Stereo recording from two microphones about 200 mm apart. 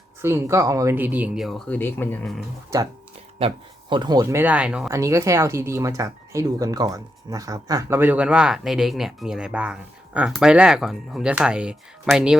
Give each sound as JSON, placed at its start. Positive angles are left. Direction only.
{"t": 0.2, "sound": "speech", "side_deg": -10}
{"t": 3.3, "sound": "speech", "side_deg": -25}